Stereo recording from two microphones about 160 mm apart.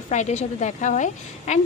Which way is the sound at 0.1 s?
45° left (ahead or behind).